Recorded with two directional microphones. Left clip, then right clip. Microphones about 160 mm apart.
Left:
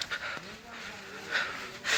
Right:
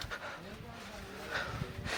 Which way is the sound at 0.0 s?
25° right (ahead or behind).